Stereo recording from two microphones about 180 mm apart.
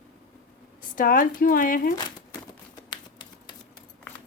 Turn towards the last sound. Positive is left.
turn(degrees=25)  # may be behind; listen again after turning